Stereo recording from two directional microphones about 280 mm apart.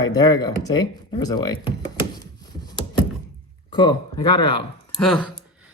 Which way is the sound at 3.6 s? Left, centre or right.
Centre.